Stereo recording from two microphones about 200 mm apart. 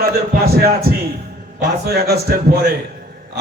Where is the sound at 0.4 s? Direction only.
50° right (ahead or behind).